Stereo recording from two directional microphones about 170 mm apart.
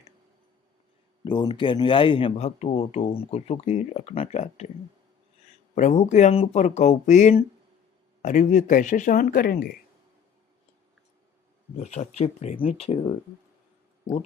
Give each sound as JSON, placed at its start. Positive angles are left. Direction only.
{"t": 1.2, "sound": "speech", "side_deg": 25}
{"t": 5.7, "sound": "speech", "side_deg": 45}
{"t": 11.8, "sound": "speech", "side_deg": 40}